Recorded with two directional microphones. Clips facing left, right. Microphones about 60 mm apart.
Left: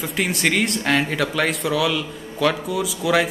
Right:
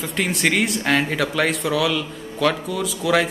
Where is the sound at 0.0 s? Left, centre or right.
Centre.